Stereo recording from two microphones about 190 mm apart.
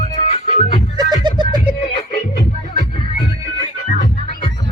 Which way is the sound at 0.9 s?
25° right (ahead or behind).